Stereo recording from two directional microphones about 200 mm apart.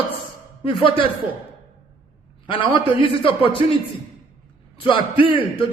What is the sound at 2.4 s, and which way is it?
A man's voice, 25° left (ahead or behind).